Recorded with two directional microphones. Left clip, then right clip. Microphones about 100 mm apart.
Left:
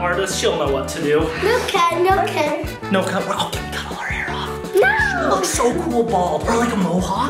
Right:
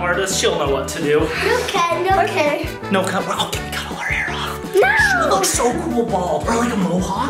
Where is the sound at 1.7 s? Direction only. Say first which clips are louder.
Left 1 dB; 20° left (ahead or behind).